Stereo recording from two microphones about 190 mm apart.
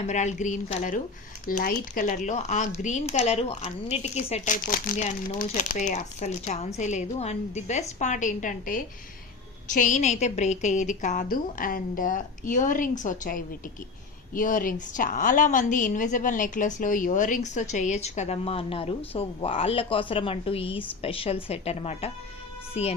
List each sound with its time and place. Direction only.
0.1 s a woman's voice: 40° left (ahead or behind)